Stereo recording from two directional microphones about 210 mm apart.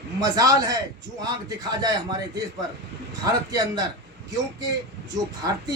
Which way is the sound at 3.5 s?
20° right (ahead or behind).